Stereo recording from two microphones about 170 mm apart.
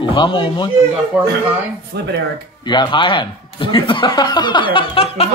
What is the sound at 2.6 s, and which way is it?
Speech, 25° left (ahead or behind).